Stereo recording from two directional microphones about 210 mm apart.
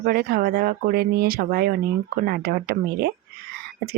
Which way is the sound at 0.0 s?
45° right (ahead or behind).